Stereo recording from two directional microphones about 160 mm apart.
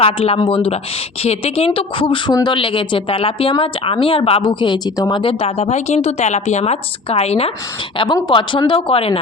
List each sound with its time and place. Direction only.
0.0 s a woman's voice: 35° left (ahead or behind)
7.9 s a woman's voice: 30° left (ahead or behind)